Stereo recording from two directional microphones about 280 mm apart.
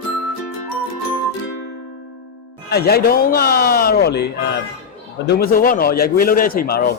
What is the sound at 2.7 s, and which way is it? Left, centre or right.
A man's voice, left.